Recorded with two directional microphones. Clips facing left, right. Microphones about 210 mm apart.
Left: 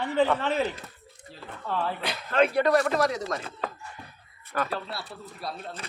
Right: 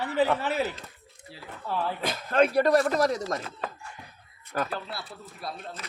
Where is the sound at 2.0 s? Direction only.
45° right (ahead or behind).